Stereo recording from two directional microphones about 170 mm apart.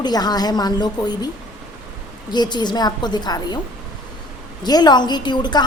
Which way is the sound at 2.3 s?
25° left (ahead or behind).